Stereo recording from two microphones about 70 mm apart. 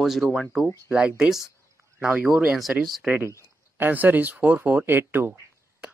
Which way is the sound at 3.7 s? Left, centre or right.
Right.